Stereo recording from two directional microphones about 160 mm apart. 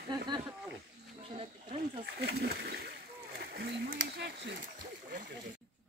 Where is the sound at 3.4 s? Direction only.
90° right; by 5.5 s 60° right (ahead or behind).